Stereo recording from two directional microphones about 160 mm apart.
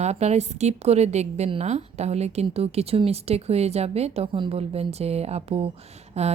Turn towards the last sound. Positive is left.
turn(degrees=-45)  # may be behind; listen again after turning